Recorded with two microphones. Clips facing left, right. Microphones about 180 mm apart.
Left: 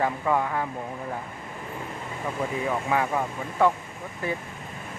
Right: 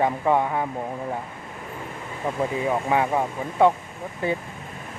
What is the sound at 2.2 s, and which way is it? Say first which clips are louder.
Speech: right 4 dB; 25° right (ahead or behind).